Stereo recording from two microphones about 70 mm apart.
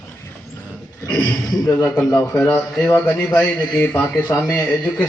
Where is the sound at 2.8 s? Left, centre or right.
Left.